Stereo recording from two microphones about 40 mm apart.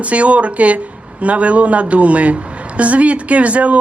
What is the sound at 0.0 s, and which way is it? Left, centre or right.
A man's voice, right.